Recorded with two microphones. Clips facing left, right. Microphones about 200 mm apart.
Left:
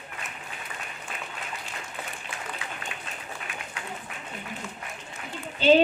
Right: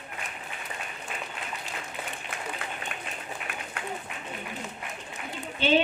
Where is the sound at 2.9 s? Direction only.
55° right (ahead or behind).